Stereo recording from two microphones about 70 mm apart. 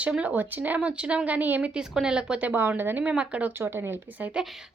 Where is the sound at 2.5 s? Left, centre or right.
Right.